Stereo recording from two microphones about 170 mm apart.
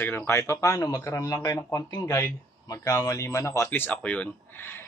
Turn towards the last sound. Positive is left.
turn(degrees=5)  # may be behind; listen again after turning